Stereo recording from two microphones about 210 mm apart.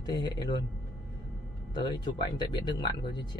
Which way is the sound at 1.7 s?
20° left (ahead or behind).